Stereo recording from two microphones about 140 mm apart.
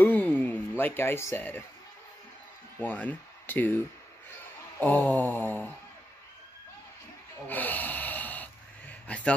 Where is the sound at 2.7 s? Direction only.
10° left (ahead or behind).